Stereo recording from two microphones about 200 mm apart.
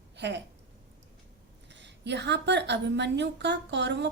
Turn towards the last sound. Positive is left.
turn(degrees=-60)  # may be behind; listen again after turning